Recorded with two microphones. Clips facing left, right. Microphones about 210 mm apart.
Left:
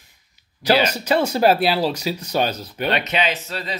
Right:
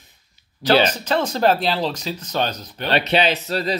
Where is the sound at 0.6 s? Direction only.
10° left (ahead or behind).